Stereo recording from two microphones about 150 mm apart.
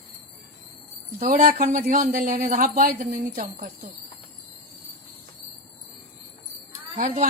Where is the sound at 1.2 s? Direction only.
65° right (ahead or behind).